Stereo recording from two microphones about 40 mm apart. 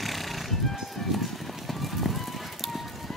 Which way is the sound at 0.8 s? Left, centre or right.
Centre.